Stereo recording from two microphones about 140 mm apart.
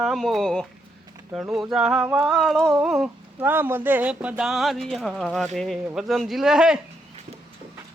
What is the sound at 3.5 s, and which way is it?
Speech, 15° right (ahead or behind).